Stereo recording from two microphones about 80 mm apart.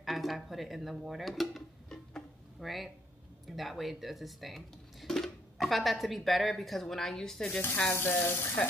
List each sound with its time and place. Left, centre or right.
0.0 s drawer open or close: centre
3.4 s speech: centre
7.6 s speech: left